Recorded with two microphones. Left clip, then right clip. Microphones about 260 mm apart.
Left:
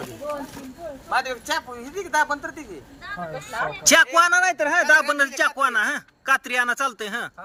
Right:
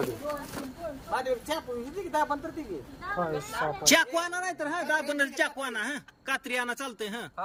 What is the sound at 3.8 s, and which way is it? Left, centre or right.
Speech, centre.